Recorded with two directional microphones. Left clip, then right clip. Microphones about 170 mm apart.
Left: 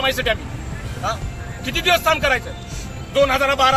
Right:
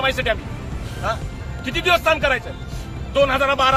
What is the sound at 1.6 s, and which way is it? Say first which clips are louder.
Speech: even; centre (ahead or behind).